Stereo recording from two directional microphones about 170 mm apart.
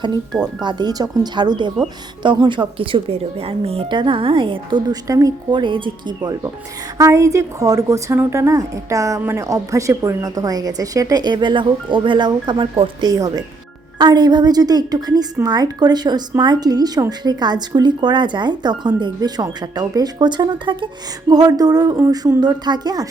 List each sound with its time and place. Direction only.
0.6 s a woman's voice: 25° right (ahead or behind)